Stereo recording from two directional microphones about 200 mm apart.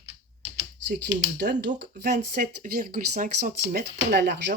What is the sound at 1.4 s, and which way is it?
Speech, 55° right (ahead or behind).